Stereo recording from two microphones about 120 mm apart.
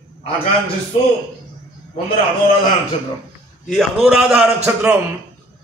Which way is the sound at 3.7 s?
Centre (ahead or behind).